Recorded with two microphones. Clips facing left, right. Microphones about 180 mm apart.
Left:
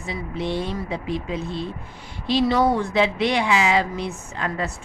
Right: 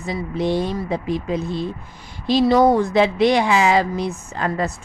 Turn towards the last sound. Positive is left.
turn(degrees=-40)  # may be behind; listen again after turning